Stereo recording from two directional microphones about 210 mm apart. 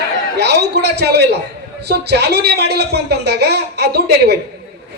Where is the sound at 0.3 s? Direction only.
50° right (ahead or behind).